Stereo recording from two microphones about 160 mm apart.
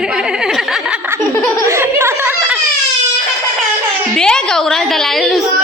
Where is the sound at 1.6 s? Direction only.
15° right (ahead or behind).